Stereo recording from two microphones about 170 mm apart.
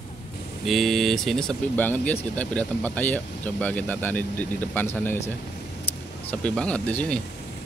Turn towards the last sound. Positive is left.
turn(degrees=5)  # may be behind; listen again after turning